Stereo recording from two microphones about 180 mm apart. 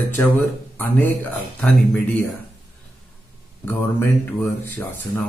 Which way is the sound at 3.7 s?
10° left (ahead or behind).